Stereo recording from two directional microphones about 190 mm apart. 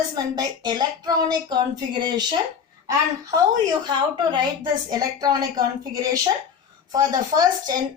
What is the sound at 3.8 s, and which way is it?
A woman's voice, 25° right (ahead or behind).